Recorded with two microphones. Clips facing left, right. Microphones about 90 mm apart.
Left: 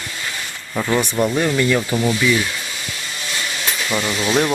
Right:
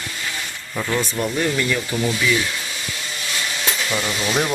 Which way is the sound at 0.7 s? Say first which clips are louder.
Left 4 dB; 15° left (ahead or behind).